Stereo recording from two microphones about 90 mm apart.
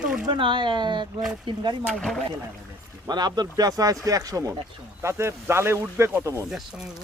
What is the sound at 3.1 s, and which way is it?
Speech, 50° right (ahead or behind).